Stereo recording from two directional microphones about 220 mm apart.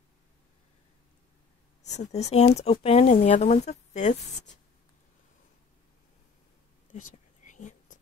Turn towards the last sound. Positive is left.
turn(degrees=35)  # may be behind; listen again after turning